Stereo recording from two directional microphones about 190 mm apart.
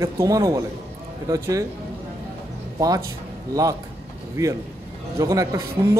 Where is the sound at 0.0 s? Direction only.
15° right (ahead or behind).